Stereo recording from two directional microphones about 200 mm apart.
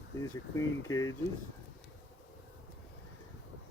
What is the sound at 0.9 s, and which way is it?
Speech, 15° left (ahead or behind).